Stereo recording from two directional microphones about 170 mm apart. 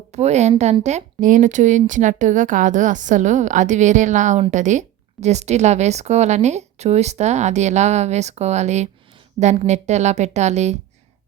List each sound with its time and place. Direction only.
0.1 s a woman's voice: 40° right (ahead or behind)